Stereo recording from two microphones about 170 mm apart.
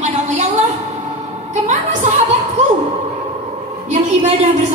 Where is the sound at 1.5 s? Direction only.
45° right (ahead or behind).